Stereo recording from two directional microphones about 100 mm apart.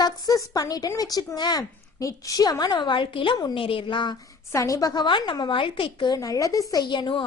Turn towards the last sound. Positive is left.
turn(degrees=50)  # may be behind; listen again after turning